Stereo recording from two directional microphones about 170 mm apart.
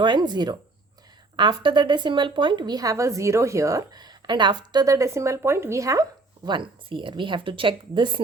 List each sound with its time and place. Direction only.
0.0 s a woman's voice: 25° right (ahead or behind)